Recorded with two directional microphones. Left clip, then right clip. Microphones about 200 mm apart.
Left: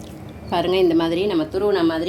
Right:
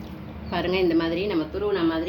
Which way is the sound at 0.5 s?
35° left (ahead or behind).